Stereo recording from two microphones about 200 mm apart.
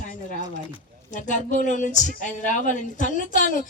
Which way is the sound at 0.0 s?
40° left (ahead or behind).